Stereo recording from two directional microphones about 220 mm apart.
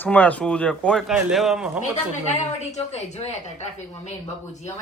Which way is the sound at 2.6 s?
30° left (ahead or behind).